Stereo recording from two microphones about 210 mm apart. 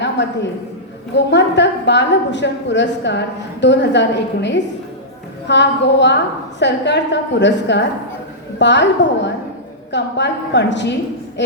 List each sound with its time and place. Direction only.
0.2 s a woman's voice: 60° left (ahead or behind)